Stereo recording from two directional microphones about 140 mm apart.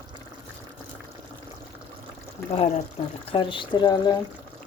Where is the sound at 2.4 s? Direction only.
15° left (ahead or behind).